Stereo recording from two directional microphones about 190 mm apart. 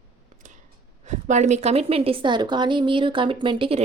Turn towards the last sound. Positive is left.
turn(degrees=-25)  # may be behind; listen again after turning